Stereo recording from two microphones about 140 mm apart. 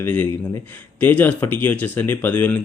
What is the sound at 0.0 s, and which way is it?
Speech, 15° left (ahead or behind).